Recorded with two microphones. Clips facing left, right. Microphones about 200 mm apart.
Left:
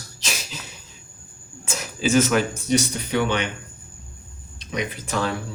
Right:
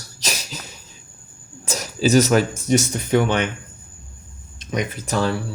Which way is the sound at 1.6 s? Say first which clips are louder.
Right 4 dB; 40° right (ahead or behind).